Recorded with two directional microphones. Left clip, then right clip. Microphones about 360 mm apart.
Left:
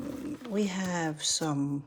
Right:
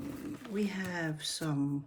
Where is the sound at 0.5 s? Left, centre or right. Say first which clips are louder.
Left 5 dB; centre.